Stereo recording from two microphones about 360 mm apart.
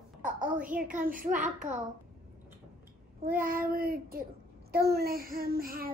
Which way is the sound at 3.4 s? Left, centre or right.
Right.